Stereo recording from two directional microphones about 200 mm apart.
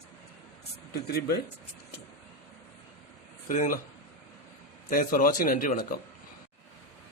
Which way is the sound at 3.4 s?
40° left (ahead or behind).